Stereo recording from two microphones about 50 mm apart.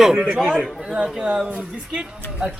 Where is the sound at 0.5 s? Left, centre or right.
Right.